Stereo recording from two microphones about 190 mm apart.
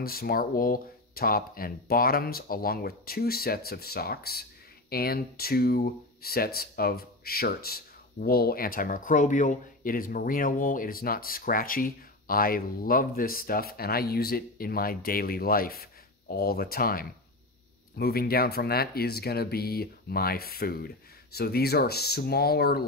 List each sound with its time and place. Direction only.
0.0 s speech: 50° left (ahead or behind)